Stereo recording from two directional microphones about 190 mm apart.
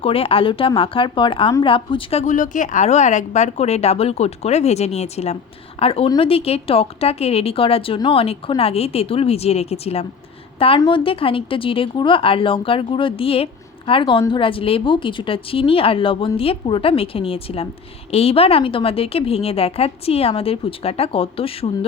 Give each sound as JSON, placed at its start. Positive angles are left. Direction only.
{"t": 0.0, "sound": "a woman's voice", "side_deg": 30}